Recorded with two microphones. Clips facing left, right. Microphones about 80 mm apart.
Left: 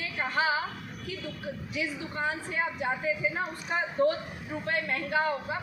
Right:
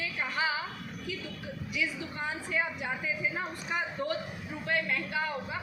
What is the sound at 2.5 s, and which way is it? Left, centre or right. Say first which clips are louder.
A man's voice: left 2 dB; left.